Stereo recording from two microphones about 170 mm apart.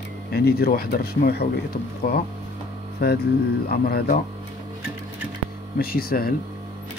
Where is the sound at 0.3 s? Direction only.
65° left (ahead or behind).